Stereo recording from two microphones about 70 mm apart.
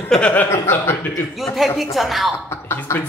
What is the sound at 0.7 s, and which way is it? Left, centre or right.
Speech, left.